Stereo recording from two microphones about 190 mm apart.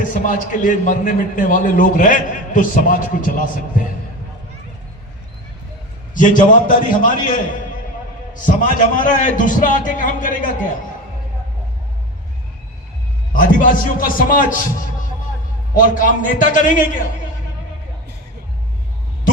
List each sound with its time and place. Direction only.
0.0 s a man's voice: 45° left (ahead or behind)
6.1 s a man's voice: 45° left (ahead or behind)
8.3 s a man's voice: 45° left (ahead or behind)
13.3 s a man's voice: 45° left (ahead or behind)
15.7 s a man's voice: 45° left (ahead or behind)